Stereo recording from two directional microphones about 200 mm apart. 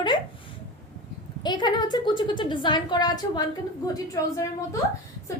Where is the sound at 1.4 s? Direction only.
20° left (ahead or behind).